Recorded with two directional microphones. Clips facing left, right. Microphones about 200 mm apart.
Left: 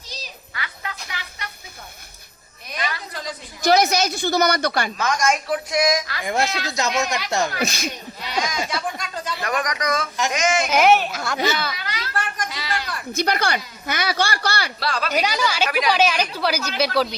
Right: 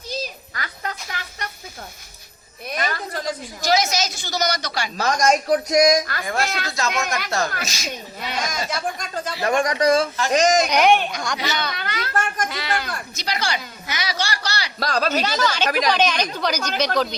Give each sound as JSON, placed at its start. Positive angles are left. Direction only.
{"t": 0.1, "sound": "a sound", "side_deg": -40}
{"t": 2.7, "sound": "a sound", "side_deg": -45}
{"t": 3.6, "sound": "speech", "side_deg": 60}
{"t": 4.9, "sound": "speech", "side_deg": -35}
{"t": 6.2, "sound": "a woman's voice", "side_deg": 20}
{"t": 7.6, "sound": "speech", "side_deg": 55}
{"t": 8.2, "sound": "a sound", "side_deg": -50}
{"t": 9.4, "sound": "speech", "side_deg": -30}
{"t": 10.7, "sound": "speech", "side_deg": 5}
{"t": 11.8, "sound": "a child's voice", "side_deg": -55}
{"t": 13.1, "sound": "speech", "side_deg": 55}
{"t": 14.8, "sound": "speech", "side_deg": -40}
{"t": 15.1, "sound": "speech", "side_deg": 10}